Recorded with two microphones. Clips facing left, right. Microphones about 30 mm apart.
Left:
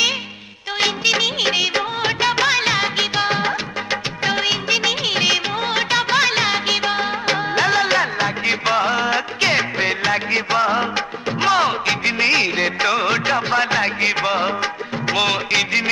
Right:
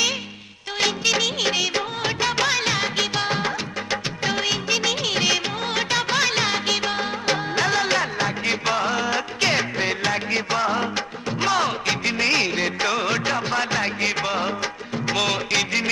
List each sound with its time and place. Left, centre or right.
0.7 s music of bollywood: centre